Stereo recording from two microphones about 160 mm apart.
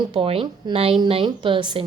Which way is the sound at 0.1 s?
35° right (ahead or behind).